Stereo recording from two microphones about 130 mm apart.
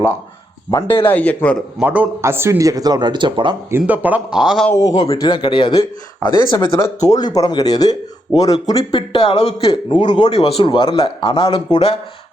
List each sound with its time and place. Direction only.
0.7 s a man's voice: 25° left (ahead or behind)
1.0 s speech: 10° left (ahead or behind)
1.8 s a man's voice: 10° right (ahead or behind); by 3.5 s 40° right (ahead or behind)
3.7 s speech: 15° right (ahead or behind)
4.7 s speech: 25° left (ahead or behind)
6.8 s a man's voice: 25° left (ahead or behind)
8.8 s speech: 40° left (ahead or behind)
10.3 s a man's voice: 45° left (ahead or behind)